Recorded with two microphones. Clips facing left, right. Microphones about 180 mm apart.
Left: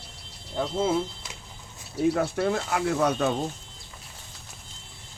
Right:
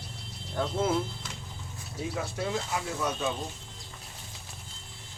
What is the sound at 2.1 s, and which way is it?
Speech, 60° left (ahead or behind).